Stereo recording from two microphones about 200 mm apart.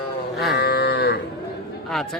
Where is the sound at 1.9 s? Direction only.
Centre (ahead or behind).